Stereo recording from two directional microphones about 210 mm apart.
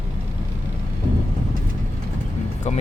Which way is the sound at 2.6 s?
30° left (ahead or behind).